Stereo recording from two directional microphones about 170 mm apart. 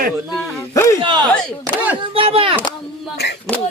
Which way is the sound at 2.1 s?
30° right (ahead or behind).